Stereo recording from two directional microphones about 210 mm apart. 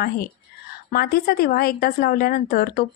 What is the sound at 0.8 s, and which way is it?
A woman's voice, 45° left (ahead or behind).